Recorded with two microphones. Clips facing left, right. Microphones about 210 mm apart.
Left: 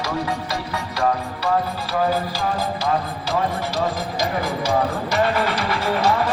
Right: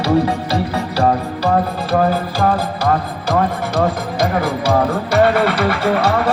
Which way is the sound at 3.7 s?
55° right (ahead or behind).